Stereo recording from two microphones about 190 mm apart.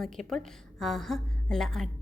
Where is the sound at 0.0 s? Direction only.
Centre (ahead or behind).